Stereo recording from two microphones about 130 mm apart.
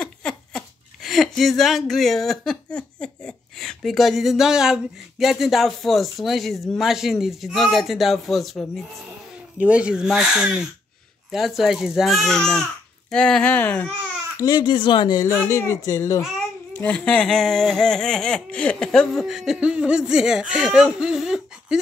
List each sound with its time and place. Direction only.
0.0 s speech: 5° left (ahead or behind)
9.6 s speech: 10° right (ahead or behind)
11.3 s a sound: centre (ahead or behind)
13.1 s speech: 5° left (ahead or behind)
14.4 s speech: 35° left (ahead or behind)
15.2 s speech: 20° left (ahead or behind)
16.7 s a sound: 10° left (ahead or behind)